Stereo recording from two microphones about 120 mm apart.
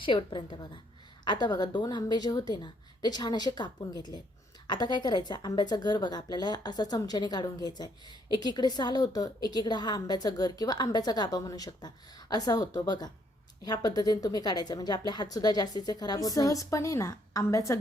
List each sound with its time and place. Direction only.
0.0 s a woman's voice: 45° left (ahead or behind); by 17.7 s 25° left (ahead or behind)